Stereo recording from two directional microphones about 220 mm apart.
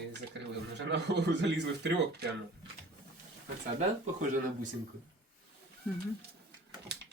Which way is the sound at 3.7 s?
35° right (ahead or behind).